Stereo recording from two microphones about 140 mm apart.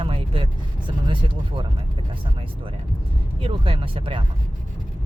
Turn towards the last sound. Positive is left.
turn(degrees=-40)  # may be behind; listen again after turning